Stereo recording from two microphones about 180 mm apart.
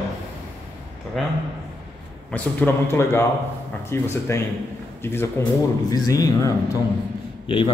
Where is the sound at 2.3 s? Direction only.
10° left (ahead or behind).